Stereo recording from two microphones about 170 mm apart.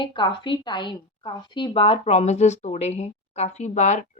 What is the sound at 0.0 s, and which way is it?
A woman's voice, 30° left (ahead or behind).